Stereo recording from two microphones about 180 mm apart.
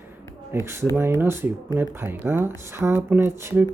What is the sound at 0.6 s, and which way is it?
Speech, 15° right (ahead or behind).